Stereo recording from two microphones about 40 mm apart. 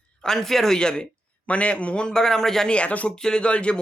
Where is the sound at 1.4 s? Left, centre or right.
Left; by 2.7 s centre.